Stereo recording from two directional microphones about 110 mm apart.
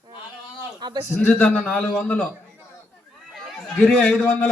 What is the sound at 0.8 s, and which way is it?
Speech, 45° right (ahead or behind).